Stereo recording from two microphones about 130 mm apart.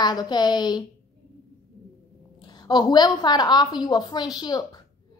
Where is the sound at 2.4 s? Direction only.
35° left (ahead or behind).